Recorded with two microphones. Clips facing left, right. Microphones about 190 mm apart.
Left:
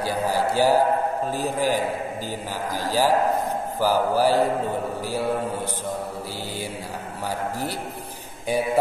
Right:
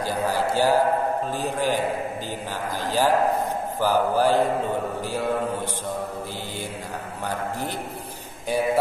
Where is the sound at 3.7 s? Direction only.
10° left (ahead or behind).